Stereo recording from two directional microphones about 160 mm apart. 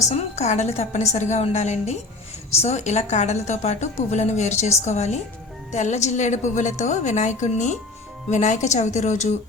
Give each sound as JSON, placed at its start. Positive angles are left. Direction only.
{"t": 0.1, "sound": "a woman's voice", "side_deg": 45}